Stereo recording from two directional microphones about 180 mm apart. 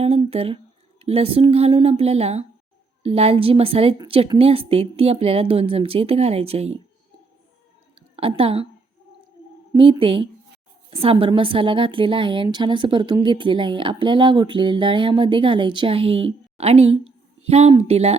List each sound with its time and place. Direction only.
0.0 s a woman's voice: 35° right (ahead or behind)
7.9 s a sound: 30° right (ahead or behind)
8.4 s a woman's voice: 30° right (ahead or behind)
9.7 s a woman's voice: 30° right (ahead or behind)